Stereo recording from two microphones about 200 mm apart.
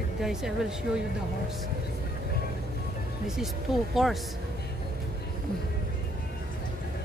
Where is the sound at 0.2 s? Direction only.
Centre (ahead or behind).